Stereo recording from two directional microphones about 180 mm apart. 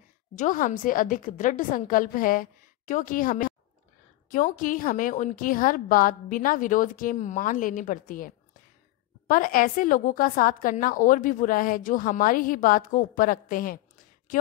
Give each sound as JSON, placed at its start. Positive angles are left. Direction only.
{"t": 0.4, "sound": "a woman's voice", "side_deg": 45}
{"t": 9.3, "sound": "a woman's voice", "side_deg": 50}